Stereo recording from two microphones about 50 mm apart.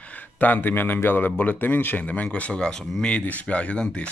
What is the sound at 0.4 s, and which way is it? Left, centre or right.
Speech, left.